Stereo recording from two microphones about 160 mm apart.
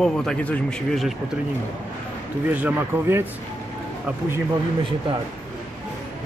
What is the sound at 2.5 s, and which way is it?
Speech, 10° right (ahead or behind).